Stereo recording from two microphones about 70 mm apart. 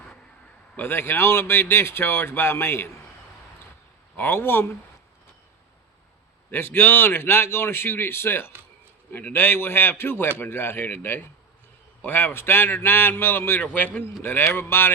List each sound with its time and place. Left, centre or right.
0.8 s a man's voice: left
4.2 s a man's voice: left
6.5 s a man's voice: left